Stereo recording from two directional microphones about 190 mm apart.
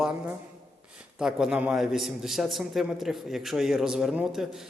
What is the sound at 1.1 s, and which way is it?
A man's voice, 5° right (ahead or behind).